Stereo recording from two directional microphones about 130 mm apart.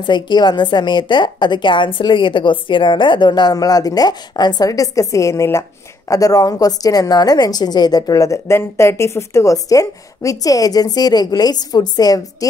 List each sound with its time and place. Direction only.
0.0 s a woman's voice: 35° left (ahead or behind)